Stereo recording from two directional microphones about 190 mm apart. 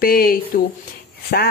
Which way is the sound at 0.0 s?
50° left (ahead or behind).